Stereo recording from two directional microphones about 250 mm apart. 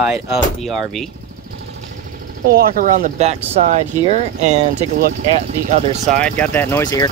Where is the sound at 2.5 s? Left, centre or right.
Right.